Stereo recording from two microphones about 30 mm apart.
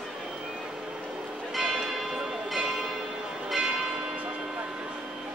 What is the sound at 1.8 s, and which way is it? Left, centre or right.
Church bell, centre.